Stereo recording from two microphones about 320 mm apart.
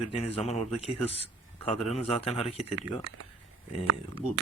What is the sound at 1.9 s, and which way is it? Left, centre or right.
Speech, centre.